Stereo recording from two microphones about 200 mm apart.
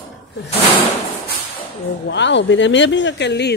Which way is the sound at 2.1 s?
65° left (ahead or behind).